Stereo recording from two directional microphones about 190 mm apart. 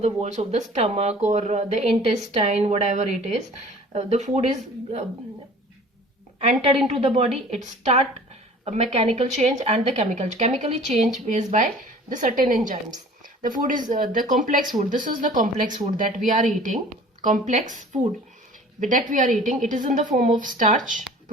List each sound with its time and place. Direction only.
0.0 s a woman's voice: 35° right (ahead or behind)
6.4 s a woman's voice: 35° right (ahead or behind)
13.2 s a sound: 45° right (ahead or behind)
13.8 s speech: 45° right (ahead or behind)